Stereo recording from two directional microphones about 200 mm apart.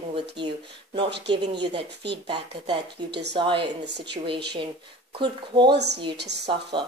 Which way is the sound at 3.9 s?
55° right (ahead or behind).